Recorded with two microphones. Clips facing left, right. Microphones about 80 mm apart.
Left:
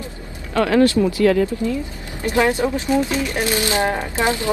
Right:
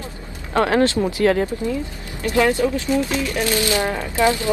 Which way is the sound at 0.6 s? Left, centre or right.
Right.